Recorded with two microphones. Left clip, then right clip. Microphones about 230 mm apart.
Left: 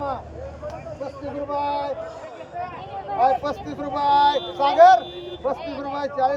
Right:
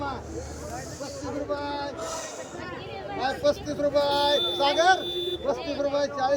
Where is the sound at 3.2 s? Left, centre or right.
Centre.